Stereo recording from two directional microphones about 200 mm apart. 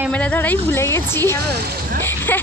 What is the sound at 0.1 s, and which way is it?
A woman's voice, 5° left (ahead or behind).